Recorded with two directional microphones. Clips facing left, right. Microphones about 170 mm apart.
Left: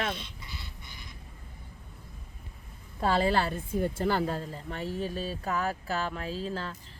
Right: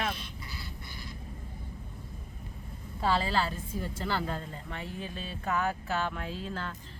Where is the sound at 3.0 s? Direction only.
50° left (ahead or behind).